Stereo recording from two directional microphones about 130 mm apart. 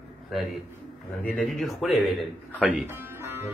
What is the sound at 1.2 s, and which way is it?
A man's voice, 10° left (ahead or behind).